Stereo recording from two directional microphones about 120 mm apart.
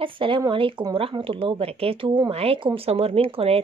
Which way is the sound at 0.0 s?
45° right (ahead or behind).